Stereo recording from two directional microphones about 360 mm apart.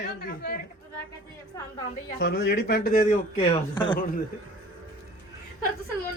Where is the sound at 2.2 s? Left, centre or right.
Left.